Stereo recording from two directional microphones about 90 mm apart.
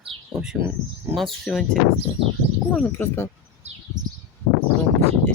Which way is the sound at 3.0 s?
25° left (ahead or behind).